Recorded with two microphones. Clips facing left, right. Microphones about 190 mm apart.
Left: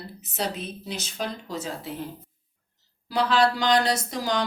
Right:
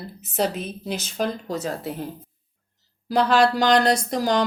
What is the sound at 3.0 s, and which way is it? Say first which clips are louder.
A woman's voice: right 3 dB; 45° right (ahead or behind).